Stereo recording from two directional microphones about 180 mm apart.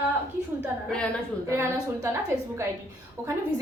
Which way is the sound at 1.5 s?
15° right (ahead or behind).